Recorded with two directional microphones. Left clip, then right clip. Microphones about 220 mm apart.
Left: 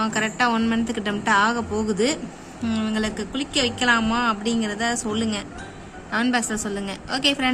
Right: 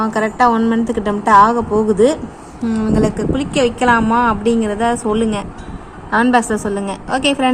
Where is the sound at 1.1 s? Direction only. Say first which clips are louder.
Right 10 dB; 20° left (ahead or behind).